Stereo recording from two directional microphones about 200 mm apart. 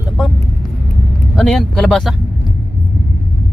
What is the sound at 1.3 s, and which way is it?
Speech, centre (ahead or behind).